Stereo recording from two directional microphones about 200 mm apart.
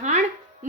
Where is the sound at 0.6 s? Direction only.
40° right (ahead or behind).